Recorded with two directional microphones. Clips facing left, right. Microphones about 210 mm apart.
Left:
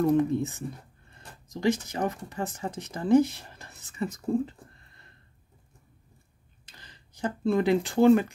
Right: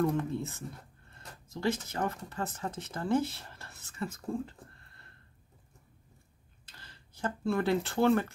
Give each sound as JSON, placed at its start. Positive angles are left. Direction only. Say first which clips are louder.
{"t": 0.0, "sound": "speech", "louder": "left 7 dB", "side_deg": 15}
{"t": 6.8, "sound": "speech", "louder": "left 4 dB", "side_deg": 15}